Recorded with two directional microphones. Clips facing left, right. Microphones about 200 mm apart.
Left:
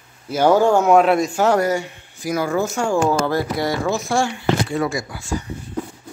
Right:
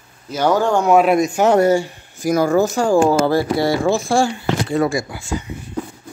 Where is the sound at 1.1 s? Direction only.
15° right (ahead or behind).